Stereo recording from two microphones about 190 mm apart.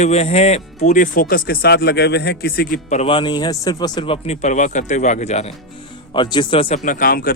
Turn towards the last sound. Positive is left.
turn(degrees=50)  # may be behind; listen again after turning